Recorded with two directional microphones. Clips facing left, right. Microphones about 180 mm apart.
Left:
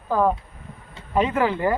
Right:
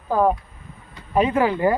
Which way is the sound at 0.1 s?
15° right (ahead or behind).